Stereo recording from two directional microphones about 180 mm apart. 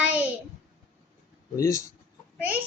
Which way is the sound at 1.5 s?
15° left (ahead or behind).